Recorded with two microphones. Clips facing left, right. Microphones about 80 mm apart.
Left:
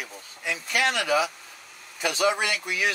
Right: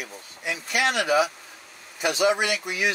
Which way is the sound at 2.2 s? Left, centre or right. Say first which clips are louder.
Right 2 dB; right.